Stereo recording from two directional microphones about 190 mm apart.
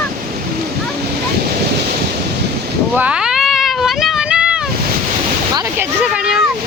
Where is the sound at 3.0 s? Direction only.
5° right (ahead or behind).